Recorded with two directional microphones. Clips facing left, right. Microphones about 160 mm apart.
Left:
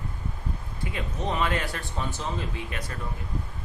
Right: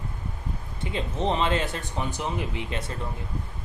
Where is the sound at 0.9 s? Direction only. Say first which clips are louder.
Right 4 dB; 25° right (ahead or behind).